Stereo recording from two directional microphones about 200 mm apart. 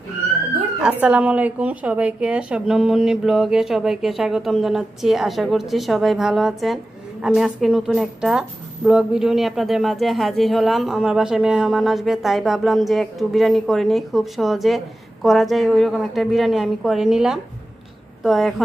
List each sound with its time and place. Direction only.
1.0 s a woman's voice: 5° right (ahead or behind)